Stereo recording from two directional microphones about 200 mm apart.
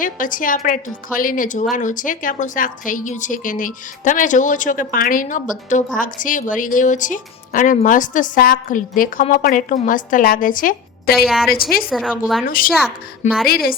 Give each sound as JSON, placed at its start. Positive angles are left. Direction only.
{"t": 0.0, "sound": "a woman's voice", "side_deg": 40}
{"t": 11.9, "sound": "a woman's voice", "side_deg": 0}
{"t": 12.5, "sound": "speech", "side_deg": 45}